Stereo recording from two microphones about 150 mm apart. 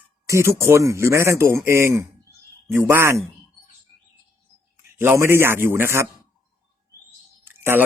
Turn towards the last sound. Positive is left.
turn(degrees=-15)  # may be behind; listen again after turning